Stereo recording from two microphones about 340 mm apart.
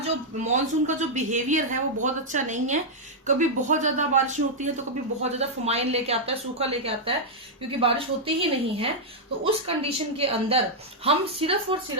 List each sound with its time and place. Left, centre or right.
0.4 s a woman's voice: right